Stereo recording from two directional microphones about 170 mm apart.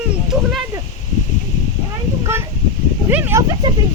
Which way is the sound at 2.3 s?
15° right (ahead or behind).